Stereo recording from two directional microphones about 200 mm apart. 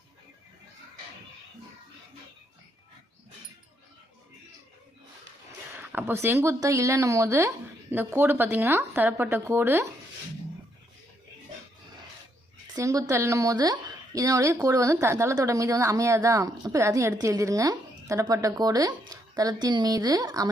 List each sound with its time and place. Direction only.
5.7 s speech: 10° right (ahead or behind)
12.7 s speech: 15° right (ahead or behind)